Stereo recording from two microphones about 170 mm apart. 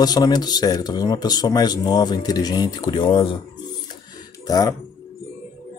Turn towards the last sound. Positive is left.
turn(degrees=20)  # may be behind; listen again after turning